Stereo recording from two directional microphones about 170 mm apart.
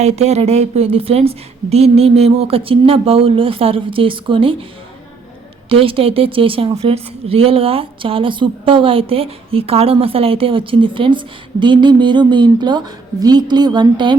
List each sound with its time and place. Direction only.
0.0 s a woman's voice: 40° right (ahead or behind)
5.6 s a woman's voice: 35° right (ahead or behind)